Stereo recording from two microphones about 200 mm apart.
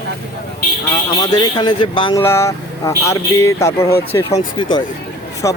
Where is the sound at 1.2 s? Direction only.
20° left (ahead or behind).